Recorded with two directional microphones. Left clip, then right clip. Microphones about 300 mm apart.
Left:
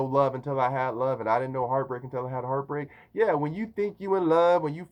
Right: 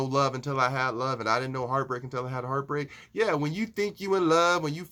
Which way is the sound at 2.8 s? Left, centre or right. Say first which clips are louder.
Left 2 dB; centre.